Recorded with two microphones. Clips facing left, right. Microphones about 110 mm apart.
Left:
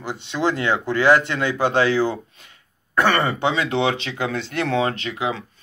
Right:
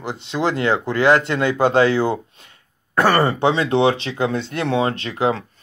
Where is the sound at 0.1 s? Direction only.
30° right (ahead or behind).